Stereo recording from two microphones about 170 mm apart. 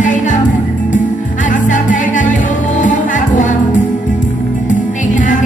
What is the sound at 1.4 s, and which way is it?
Music, 50° left (ahead or behind).